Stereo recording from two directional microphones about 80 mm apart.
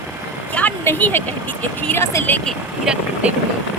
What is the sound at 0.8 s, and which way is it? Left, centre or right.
Speech, left.